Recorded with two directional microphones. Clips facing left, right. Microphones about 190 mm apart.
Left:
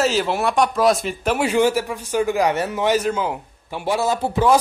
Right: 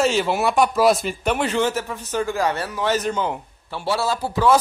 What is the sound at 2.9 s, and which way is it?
Speech, 5° left (ahead or behind).